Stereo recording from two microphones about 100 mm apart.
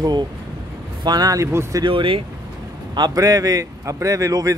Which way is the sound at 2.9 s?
40° right (ahead or behind).